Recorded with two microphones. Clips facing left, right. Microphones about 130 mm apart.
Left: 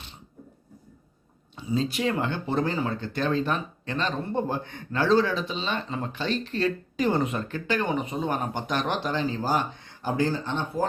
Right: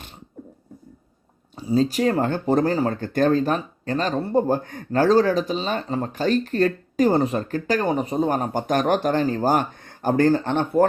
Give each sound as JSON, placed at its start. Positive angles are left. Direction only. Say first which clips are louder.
{"t": 1.5, "sound": "speech", "louder": "right 7 dB", "side_deg": -40}